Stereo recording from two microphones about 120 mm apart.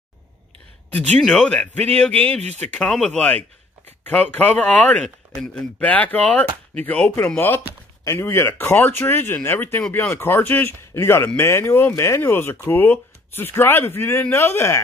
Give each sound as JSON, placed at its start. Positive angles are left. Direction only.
{"t": 0.9, "sound": "speech", "side_deg": 10}
{"t": 2.4, "sound": "speech", "side_deg": -65}
{"t": 2.8, "sound": "speech", "side_deg": 10}
{"t": 5.8, "sound": "speech", "side_deg": 15}